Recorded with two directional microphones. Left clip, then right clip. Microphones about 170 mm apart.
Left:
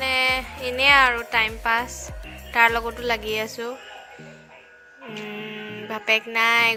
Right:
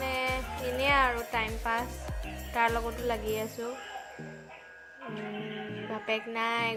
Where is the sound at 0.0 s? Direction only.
10° left (ahead or behind).